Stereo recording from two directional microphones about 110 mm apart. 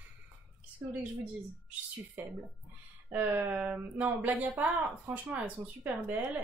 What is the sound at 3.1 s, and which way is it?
Speech, 15° right (ahead or behind).